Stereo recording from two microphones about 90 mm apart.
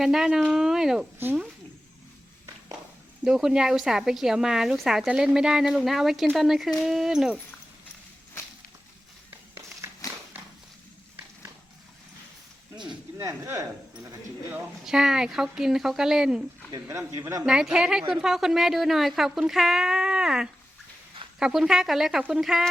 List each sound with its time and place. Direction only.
0.0 s speech: 5° right (ahead or behind)
3.2 s speech: 5° right (ahead or behind)
13.1 s speech: 35° right (ahead or behind)
14.8 s speech: 5° right (ahead or behind)
17.1 s speech: 40° right (ahead or behind)
17.4 s speech: 5° right (ahead or behind)